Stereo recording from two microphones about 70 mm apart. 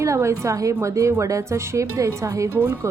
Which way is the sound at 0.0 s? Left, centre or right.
Right.